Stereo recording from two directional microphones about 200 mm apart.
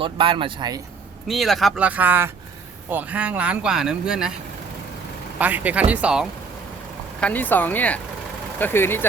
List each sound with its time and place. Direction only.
0.0 s speech: 25° right (ahead or behind)
1.3 s speech: centre (ahead or behind)
5.4 s speech: 10° right (ahead or behind)
7.2 s speech: 10° left (ahead or behind)